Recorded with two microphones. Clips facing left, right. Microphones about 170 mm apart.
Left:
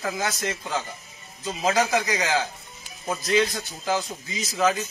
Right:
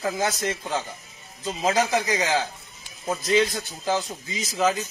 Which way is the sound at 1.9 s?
20° right (ahead or behind).